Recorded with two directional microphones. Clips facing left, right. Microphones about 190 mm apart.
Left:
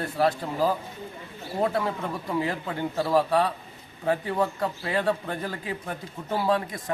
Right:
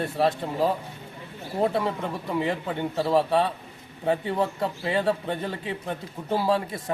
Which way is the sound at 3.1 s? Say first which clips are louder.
Even; 25° right (ahead or behind).